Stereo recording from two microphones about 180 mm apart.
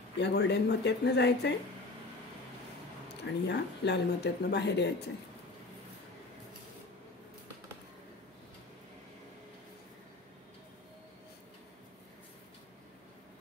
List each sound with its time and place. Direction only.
0.2 s speech: 70° left (ahead or behind)
3.4 s speech: 70° left (ahead or behind)